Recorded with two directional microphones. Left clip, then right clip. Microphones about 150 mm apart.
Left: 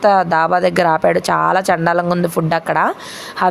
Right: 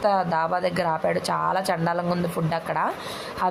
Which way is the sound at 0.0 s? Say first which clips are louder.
Left 9 dB; 45° left (ahead or behind).